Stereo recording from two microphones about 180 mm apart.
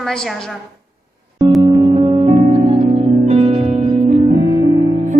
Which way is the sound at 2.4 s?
20° right (ahead or behind).